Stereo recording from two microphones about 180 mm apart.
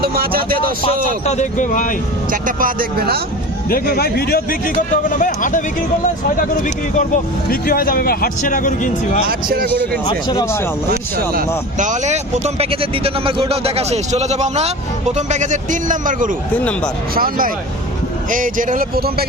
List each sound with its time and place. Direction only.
0.0 s speech: 55° right (ahead or behind)
1.2 s speech: 40° left (ahead or behind)
2.3 s speech: 50° right (ahead or behind)
3.7 s speech: 55° left (ahead or behind)
7.5 s speech: 50° left (ahead or behind)
9.2 s speech: 55° right (ahead or behind)
10.1 s speech: 20° left (ahead or behind)
11.3 s speech: 45° right (ahead or behind)